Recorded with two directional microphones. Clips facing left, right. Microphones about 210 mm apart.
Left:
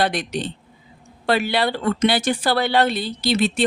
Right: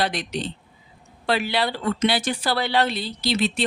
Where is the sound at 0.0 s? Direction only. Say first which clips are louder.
Left 3 dB; 50° left (ahead or behind).